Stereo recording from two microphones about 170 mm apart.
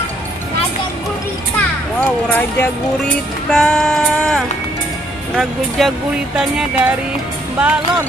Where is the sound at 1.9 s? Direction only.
10° left (ahead or behind).